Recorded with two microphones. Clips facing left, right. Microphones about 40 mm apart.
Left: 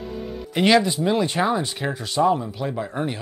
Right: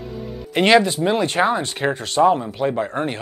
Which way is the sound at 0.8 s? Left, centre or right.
Right.